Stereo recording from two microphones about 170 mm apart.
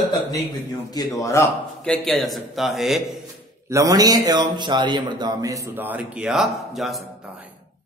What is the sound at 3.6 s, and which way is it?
A man's voice, 20° right (ahead or behind).